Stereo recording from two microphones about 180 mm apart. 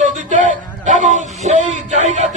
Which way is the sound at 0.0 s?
45° right (ahead or behind).